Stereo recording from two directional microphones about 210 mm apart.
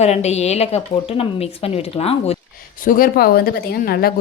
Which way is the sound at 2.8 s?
40° left (ahead or behind).